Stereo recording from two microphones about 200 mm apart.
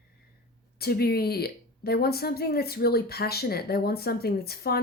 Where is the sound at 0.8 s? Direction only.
50° left (ahead or behind).